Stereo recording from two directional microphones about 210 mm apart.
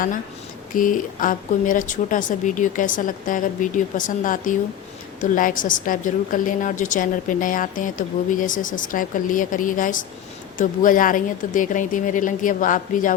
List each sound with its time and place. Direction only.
0.7 s a woman's voice: 40° left (ahead or behind)